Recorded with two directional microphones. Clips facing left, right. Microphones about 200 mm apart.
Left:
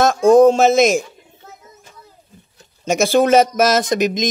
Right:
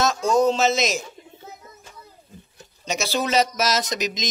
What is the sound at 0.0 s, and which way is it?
Speech, 55° left (ahead or behind).